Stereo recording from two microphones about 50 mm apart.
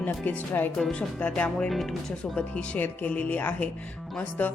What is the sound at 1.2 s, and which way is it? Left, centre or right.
Speech, left.